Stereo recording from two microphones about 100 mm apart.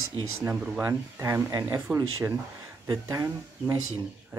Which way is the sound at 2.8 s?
35° right (ahead or behind).